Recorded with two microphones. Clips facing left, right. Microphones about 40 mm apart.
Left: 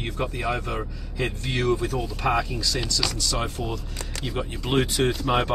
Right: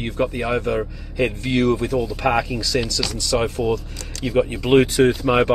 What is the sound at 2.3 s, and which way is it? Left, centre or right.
Speech, right.